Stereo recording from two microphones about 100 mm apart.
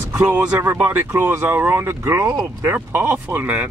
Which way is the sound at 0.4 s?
10° right (ahead or behind).